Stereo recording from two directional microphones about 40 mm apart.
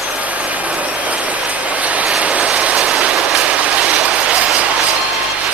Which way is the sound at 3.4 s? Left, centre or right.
Right.